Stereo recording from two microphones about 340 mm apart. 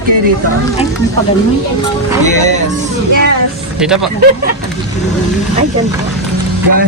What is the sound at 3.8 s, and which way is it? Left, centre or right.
Speech, centre.